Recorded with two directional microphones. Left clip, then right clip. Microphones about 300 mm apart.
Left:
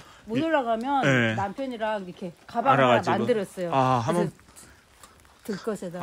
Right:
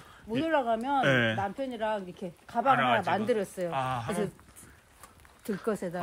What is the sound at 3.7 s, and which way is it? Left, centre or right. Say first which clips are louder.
Speech: left 14 dB; centre.